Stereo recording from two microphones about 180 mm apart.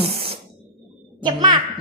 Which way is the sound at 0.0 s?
30° right (ahead or behind).